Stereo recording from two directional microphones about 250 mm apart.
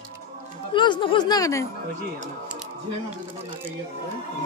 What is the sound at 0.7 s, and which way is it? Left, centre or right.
Speech, centre.